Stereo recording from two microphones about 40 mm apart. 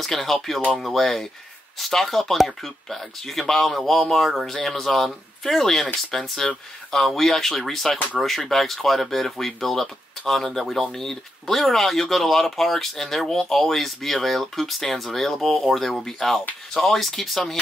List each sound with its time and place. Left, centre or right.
0.0 s speech: centre